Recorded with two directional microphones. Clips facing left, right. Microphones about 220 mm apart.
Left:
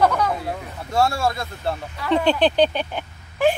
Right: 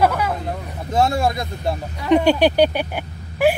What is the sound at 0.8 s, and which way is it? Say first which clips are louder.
Speech: right 2 dB; 20° right (ahead or behind).